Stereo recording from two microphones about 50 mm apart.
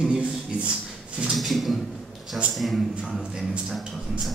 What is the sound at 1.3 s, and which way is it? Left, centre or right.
A man's voice, centre.